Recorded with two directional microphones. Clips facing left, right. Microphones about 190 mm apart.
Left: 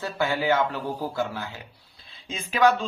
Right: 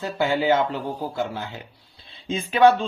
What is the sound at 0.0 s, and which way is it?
Speech, 20° right (ahead or behind).